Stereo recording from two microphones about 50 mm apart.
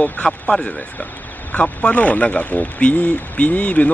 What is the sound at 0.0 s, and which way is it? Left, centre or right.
A man's voice, centre.